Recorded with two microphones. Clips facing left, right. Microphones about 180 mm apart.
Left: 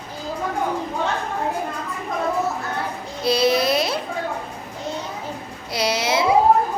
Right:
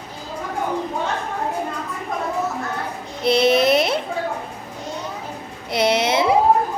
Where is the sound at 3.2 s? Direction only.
25° right (ahead or behind).